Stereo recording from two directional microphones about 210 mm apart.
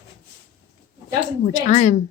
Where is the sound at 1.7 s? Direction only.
35° left (ahead or behind).